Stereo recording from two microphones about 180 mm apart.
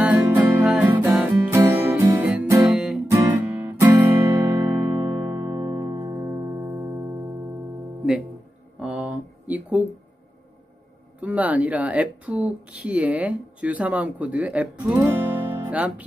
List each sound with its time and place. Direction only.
0.0 s music: 10° right (ahead or behind)
3.1 s guitar: 15° right (ahead or behind)
8.7 s a sound: 5° right (ahead or behind)
11.1 s speech: 10° right (ahead or behind)